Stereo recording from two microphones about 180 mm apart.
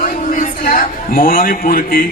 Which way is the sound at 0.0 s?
50° left (ahead or behind).